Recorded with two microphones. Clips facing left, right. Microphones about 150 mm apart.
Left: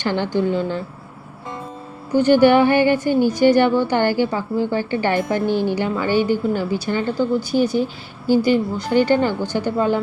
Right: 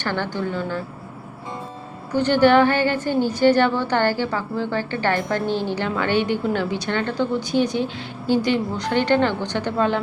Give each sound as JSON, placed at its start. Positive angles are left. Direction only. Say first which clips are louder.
{"t": 0.0, "sound": "a woman's voice", "louder": "left 5 dB", "side_deg": 15}
{"t": 2.1, "sound": "a woman's voice", "louder": "left 3 dB", "side_deg": 10}